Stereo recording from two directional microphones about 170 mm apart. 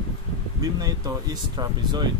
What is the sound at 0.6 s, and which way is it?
Speech, 20° right (ahead or behind).